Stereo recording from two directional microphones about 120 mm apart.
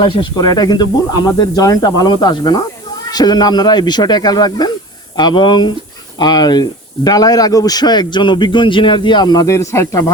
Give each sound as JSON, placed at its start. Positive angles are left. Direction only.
{"t": 0.0, "sound": "speech", "side_deg": 35}